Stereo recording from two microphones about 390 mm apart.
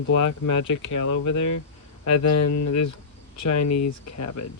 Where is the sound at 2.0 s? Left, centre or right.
Left.